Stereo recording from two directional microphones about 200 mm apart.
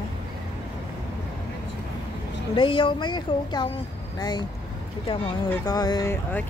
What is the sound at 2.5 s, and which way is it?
Speech, 25° left (ahead or behind).